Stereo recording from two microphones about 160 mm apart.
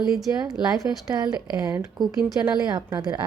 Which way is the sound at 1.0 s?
25° right (ahead or behind).